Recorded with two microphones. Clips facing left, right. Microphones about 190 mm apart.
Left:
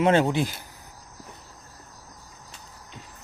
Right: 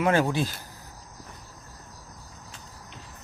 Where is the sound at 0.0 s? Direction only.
25° left (ahead or behind).